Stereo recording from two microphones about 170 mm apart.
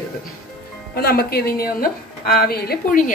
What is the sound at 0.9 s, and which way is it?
A woman's voice, 65° left (ahead or behind).